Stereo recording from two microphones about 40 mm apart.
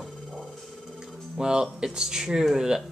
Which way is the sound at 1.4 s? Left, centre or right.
Centre.